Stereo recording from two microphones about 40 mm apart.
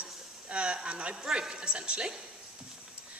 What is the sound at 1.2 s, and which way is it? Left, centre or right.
Speech, centre.